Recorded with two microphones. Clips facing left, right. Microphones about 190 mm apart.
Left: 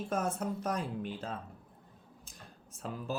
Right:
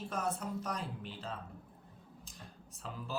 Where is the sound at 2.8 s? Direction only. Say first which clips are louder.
Left 6 dB; 50° left (ahead or behind).